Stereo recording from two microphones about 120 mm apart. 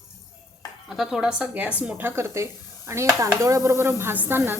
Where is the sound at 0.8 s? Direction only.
5° right (ahead or behind).